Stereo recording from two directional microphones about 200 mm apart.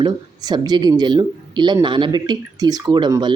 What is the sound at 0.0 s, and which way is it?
Speech, 20° right (ahead or behind).